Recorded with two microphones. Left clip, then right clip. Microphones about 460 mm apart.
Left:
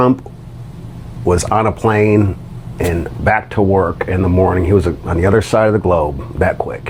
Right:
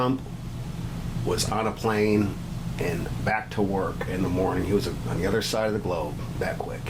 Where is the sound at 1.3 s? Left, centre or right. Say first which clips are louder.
Left 13 dB; left.